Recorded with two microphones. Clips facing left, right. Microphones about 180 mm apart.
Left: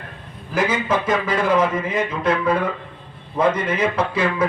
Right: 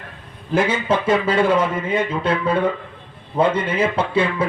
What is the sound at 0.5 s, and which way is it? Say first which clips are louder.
A man's voice: right 2 dB; 30° right (ahead or behind).